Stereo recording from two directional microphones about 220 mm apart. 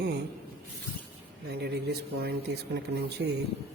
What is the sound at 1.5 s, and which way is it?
Speech, 50° right (ahead or behind).